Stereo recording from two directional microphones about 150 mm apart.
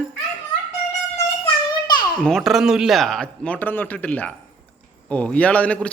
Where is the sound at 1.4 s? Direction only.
30° left (ahead or behind).